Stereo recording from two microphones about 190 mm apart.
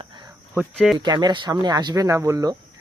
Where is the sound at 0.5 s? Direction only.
Centre (ahead or behind).